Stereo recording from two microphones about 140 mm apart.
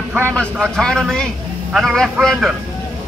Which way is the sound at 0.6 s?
5° left (ahead or behind).